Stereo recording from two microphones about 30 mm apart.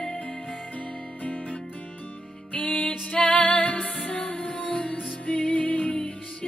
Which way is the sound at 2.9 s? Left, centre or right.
Left.